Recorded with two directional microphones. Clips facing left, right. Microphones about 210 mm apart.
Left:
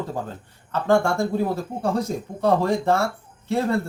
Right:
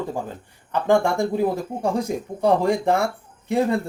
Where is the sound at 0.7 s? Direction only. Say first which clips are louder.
Right 1 dB; 15° right (ahead or behind).